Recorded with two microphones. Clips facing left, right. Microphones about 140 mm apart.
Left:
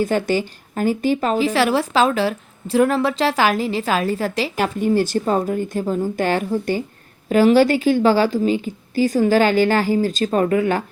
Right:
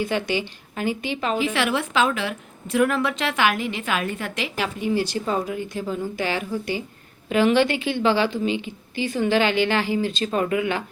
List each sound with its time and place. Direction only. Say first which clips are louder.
0.0 s a woman's voice: left 5 dB; 45° left (ahead or behind)